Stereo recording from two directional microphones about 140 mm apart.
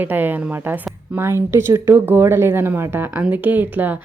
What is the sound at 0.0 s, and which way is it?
Speech, 15° right (ahead or behind).